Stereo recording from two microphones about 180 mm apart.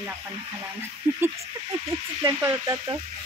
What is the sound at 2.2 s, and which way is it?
Speech, 20° right (ahead or behind).